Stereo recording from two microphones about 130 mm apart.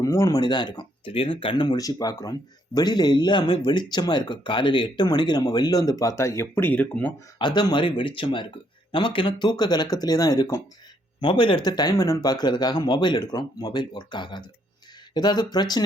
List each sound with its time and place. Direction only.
0.0 s speech: 25° left (ahead or behind)
0.3 s speech: 35° left (ahead or behind)
6.5 s speech: 10° left (ahead or behind)
7.3 s speech: 35° left (ahead or behind)